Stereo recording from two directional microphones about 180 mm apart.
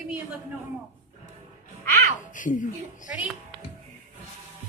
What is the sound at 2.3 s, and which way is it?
Speech, 45° left (ahead or behind).